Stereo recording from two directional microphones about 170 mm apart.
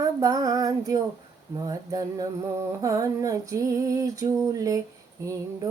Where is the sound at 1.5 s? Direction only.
20° right (ahead or behind).